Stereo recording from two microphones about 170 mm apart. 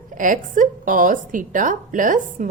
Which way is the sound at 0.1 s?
50° right (ahead or behind).